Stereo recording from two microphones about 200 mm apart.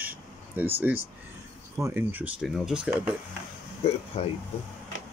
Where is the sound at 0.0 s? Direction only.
10° right (ahead or behind).